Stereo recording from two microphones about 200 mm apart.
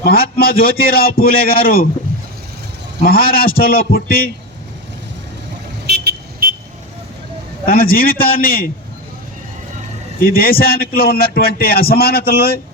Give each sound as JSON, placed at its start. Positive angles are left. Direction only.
{"t": 0.0, "sound": "a man's voice", "side_deg": 50}
{"t": 3.0, "sound": "a man's voice", "side_deg": 50}
{"t": 5.8, "sound": "vehicle", "side_deg": -55}
{"t": 7.7, "sound": "a man's voice", "side_deg": 50}
{"t": 10.2, "sound": "a man's voice", "side_deg": 50}